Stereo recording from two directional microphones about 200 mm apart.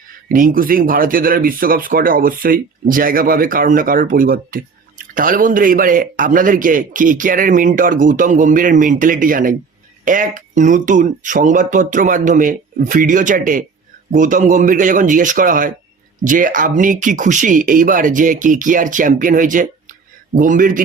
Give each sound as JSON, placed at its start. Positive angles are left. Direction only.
{"t": 0.3, "sound": "speech", "side_deg": -45}